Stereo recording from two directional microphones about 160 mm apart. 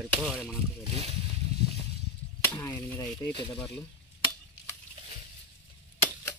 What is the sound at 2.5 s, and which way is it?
Speech, 10° left (ahead or behind).